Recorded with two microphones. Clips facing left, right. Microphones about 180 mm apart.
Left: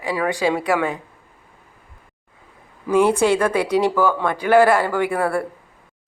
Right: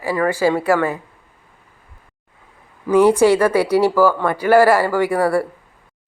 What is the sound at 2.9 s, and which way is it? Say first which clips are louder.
Speech: right 4 dB; 10° right (ahead or behind).